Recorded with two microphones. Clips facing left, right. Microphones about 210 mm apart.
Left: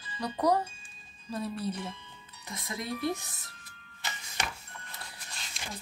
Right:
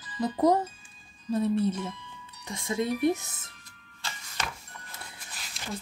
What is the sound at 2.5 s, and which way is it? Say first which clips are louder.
Speech: right 8 dB; 25° right (ahead or behind).